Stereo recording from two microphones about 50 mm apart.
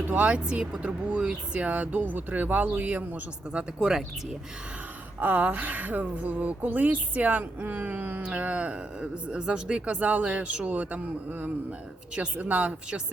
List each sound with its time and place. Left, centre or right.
0.1 s speech: right
0.9 s speech: right
3.6 s speech: centre
5.2 s speech: right
9.0 s speech: centre
10.7 s speech: right